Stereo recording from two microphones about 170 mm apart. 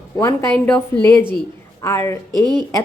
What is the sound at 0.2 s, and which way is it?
Speech, 10° left (ahead or behind).